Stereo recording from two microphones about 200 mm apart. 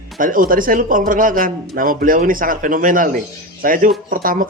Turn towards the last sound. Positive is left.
turn(degrees=-45)  # may be behind; listen again after turning